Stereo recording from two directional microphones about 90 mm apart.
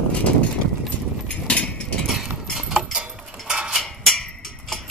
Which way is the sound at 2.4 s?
5° right (ahead or behind).